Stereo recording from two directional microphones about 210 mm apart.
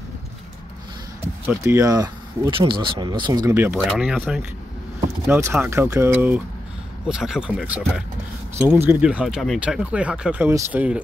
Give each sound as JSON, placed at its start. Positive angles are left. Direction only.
{"t": 1.4, "sound": "speech", "side_deg": -10}